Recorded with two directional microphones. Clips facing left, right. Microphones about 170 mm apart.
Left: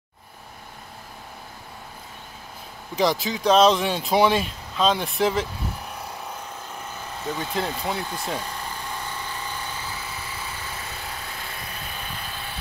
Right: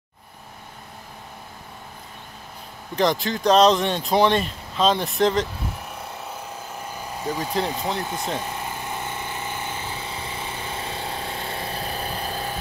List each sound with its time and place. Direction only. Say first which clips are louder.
3.0 s speech: right 1 dB; centre (ahead or behind)
6.9 s vehicle: right 3 dB; 10° right (ahead or behind)
7.3 s speech: right 2 dB; centre (ahead or behind)
8.0 s vehicle: right 2 dB; 20° right (ahead or behind); by 12.5 s 40° right (ahead or behind)